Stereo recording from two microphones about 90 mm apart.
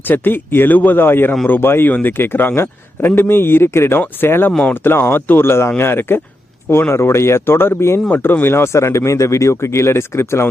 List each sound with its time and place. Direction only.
0.0 s a man's voice: 20° left (ahead or behind)